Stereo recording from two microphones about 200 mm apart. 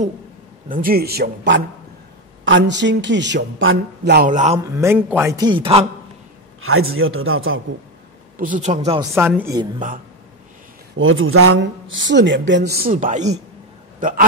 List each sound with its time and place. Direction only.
0.7 s a man's voice: 45° right (ahead or behind)
4.3 s speech: 40° right (ahead or behind)
4.7 s a man's voice: 15° right (ahead or behind)
6.6 s a man's voice: 90° right
8.4 s speech: 40° right (ahead or behind)
9.1 s speech: 10° right (ahead or behind)
11.0 s speech: 85° right
11.5 s a man's voice: 65° right (ahead or behind); by 14.2 s 40° right (ahead or behind)